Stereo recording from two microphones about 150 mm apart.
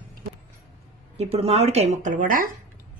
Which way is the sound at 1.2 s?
45° right (ahead or behind).